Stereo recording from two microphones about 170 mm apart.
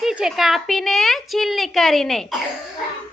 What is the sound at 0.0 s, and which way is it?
A woman's voice, 5° right (ahead or behind).